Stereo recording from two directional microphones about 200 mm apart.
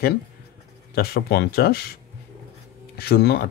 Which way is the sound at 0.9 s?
50° left (ahead or behind).